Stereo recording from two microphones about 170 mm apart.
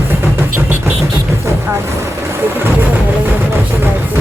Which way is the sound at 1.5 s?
15° right (ahead or behind).